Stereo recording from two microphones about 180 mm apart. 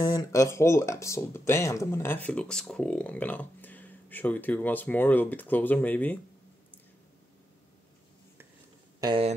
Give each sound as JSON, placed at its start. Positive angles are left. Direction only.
{"t": 0.1, "sound": "speech", "side_deg": 15}
{"t": 9.0, "sound": "speech", "side_deg": -30}